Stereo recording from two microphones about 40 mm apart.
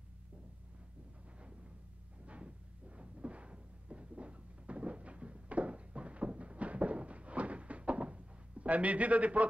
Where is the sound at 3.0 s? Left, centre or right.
Right.